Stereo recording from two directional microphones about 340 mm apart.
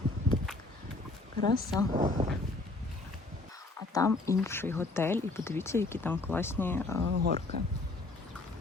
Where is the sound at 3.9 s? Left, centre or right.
Centre.